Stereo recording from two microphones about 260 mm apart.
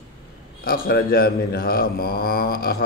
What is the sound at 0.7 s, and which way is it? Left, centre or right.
Speech, left.